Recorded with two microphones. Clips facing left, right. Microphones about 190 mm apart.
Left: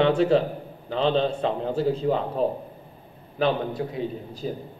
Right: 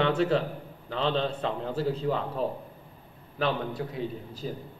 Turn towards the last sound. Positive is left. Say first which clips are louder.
# left 4 dB
turn(degrees=15)  # may be behind; listen again after turning